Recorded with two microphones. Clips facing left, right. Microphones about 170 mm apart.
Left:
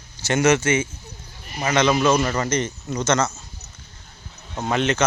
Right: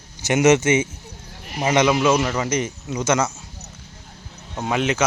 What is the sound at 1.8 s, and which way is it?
Speech, 10° right (ahead or behind).